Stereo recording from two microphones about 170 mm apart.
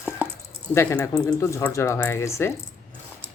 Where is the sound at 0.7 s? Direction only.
15° left (ahead or behind).